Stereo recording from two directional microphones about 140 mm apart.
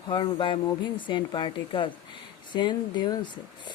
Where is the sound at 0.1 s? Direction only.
35° left (ahead or behind).